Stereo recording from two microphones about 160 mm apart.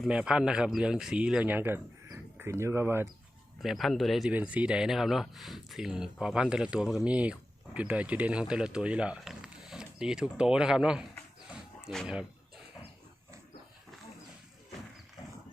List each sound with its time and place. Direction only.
0.0 s speech: 5° right (ahead or behind)
3.6 s speech: centre (ahead or behind)
11.9 s a sound: centre (ahead or behind)